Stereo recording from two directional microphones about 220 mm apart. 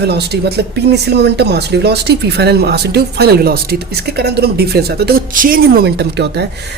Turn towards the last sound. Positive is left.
turn(degrees=-50)  # may be behind; listen again after turning